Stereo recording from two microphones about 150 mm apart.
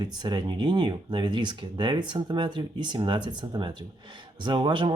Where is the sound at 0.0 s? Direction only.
30° right (ahead or behind).